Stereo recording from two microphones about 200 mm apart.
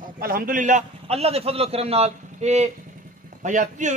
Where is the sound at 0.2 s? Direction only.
45° right (ahead or behind).